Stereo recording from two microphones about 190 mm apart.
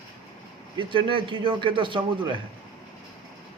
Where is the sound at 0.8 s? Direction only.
25° right (ahead or behind).